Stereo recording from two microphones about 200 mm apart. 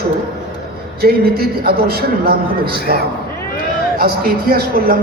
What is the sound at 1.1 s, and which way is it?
A man's voice, 50° right (ahead or behind).